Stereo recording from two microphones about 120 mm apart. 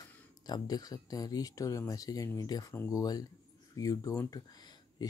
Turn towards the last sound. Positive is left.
turn(degrees=35)  # may be behind; listen again after turning